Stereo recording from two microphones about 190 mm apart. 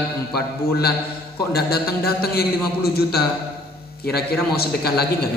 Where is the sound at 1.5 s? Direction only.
55° left (ahead or behind).